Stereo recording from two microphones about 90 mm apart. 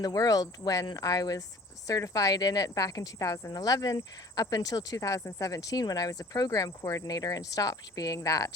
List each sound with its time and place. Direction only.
0.0 s speech: 45° left (ahead or behind)